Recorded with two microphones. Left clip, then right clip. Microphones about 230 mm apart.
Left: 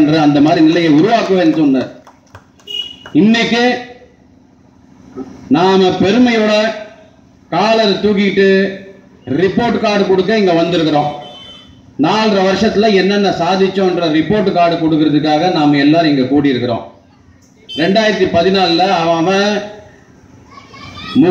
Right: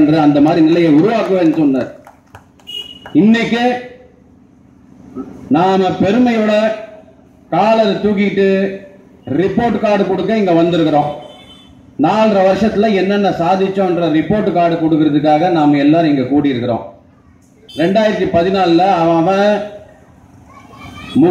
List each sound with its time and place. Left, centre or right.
0.0 s a man's voice: left
3.1 s speech: left
5.5 s a man's voice: left
12.0 s a man's voice: left
17.7 s a man's voice: left